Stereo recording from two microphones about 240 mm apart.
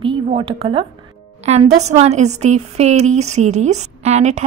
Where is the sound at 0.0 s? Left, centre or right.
Right.